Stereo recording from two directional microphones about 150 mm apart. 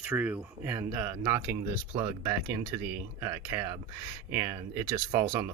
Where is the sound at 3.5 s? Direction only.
20° right (ahead or behind).